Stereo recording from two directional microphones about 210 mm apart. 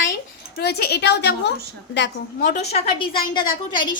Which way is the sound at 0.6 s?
50° left (ahead or behind).